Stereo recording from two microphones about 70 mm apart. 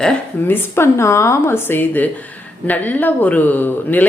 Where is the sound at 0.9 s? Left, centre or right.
Left.